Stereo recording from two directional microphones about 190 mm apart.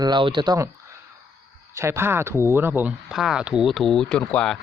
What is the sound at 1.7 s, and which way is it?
Speech, 15° right (ahead or behind).